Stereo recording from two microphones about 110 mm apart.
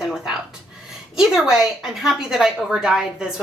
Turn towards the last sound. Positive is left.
turn(degrees=-5)  # may be behind; listen again after turning